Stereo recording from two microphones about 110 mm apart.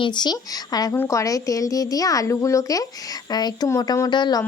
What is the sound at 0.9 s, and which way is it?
Speech, 25° left (ahead or behind).